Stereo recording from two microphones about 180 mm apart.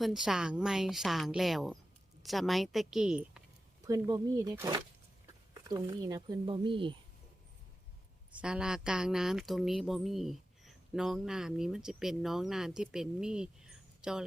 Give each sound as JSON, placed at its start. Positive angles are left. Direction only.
{"t": 0.0, "sound": "speech", "side_deg": -5}
{"t": 3.8, "sound": "speech", "side_deg": -20}
{"t": 8.4, "sound": "speech", "side_deg": -5}